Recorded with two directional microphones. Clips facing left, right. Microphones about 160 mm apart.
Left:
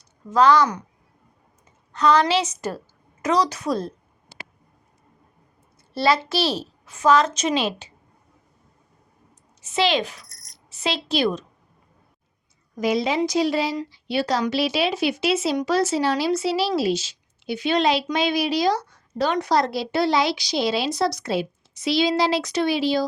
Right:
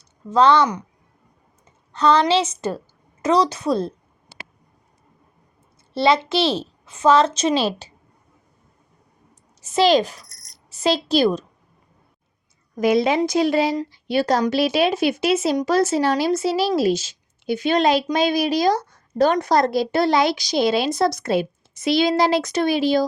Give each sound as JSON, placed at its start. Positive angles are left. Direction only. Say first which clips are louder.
{"t": 0.3, "sound": "a child's voice", "louder": "right 1 dB", "side_deg": -30}
{"t": 1.9, "sound": "a child's voice", "louder": "right 2 dB", "side_deg": -30}
{"t": 3.2, "sound": "a sound", "louder": "right 3 dB", "side_deg": -30}
{"t": 5.9, "sound": "a child's voice", "louder": "right 3 dB", "side_deg": -25}
{"t": 9.6, "sound": "a woman's voice", "louder": "right 5 dB", "side_deg": -40}
{"t": 12.7, "sound": "a woman's voice", "louder": "right 4 dB", "side_deg": -55}